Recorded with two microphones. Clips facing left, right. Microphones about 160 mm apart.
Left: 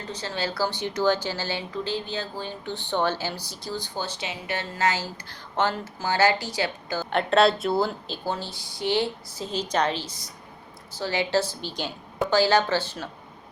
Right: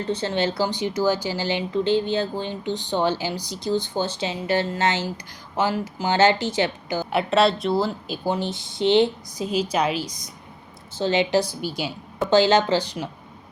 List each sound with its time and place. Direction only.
0.1 s speech: 30° right (ahead or behind)
5.5 s speech: 10° right (ahead or behind)
7.2 s a woman's voice: centre (ahead or behind)
8.0 s speech: 15° right (ahead or behind)
12.3 s speech: 20° right (ahead or behind)